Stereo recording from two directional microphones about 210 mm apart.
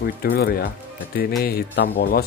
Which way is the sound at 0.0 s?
45° left (ahead or behind).